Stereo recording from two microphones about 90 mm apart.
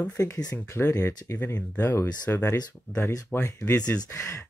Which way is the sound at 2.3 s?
40° left (ahead or behind).